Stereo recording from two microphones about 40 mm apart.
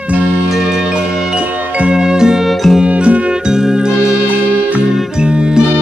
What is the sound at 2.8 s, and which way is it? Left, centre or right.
Music, right.